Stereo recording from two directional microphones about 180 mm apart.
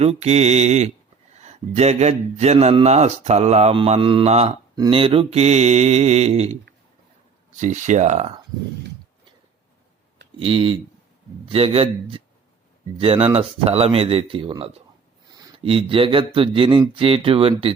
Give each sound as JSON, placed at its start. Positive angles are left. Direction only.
{"t": 0.0, "sound": "speech", "side_deg": -35}
{"t": 10.4, "sound": "speech", "side_deg": -30}